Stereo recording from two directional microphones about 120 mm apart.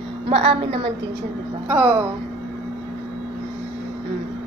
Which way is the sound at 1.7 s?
20° right (ahead or behind).